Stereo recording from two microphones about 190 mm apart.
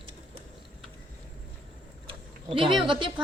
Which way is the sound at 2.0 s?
30° right (ahead or behind).